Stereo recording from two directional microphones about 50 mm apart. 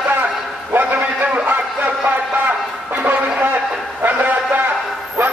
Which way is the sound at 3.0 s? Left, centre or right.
Right.